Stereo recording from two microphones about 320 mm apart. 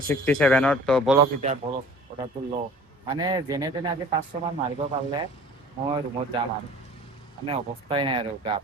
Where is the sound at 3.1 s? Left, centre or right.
Centre.